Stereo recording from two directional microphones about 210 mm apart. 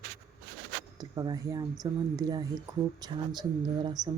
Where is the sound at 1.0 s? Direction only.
20° right (ahead or behind).